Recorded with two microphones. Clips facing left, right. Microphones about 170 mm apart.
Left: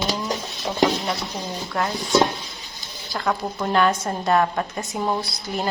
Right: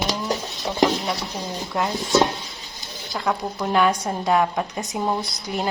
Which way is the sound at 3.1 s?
Centre (ahead or behind).